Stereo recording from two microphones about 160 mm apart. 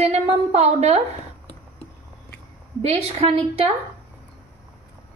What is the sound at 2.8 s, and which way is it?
Speech, 40° right (ahead or behind).